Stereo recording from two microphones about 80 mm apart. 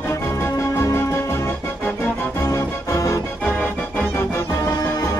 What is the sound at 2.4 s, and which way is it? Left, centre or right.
Music, left.